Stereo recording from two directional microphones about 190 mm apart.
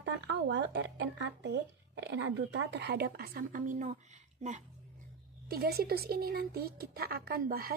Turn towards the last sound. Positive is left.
turn(degrees=-50)  # may be behind; listen again after turning